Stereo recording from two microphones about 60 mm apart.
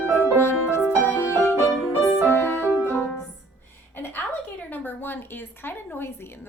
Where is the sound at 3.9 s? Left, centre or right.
Left.